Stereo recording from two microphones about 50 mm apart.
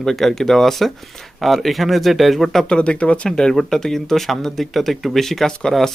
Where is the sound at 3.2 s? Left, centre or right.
Centre.